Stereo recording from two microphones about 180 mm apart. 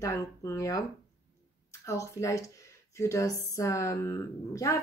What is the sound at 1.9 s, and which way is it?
Speech, 15° left (ahead or behind).